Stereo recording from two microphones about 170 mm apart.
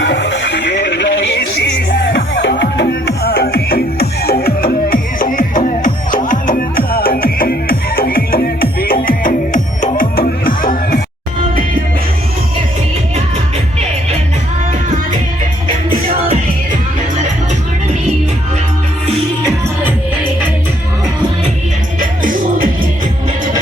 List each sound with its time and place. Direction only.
0.0 s music: 90° left; by 11.0 s 55° left (ahead or behind)